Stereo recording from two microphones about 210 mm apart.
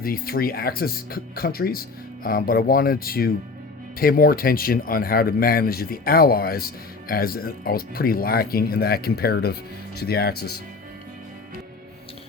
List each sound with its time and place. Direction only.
0.0 s speech: 45° left (ahead or behind)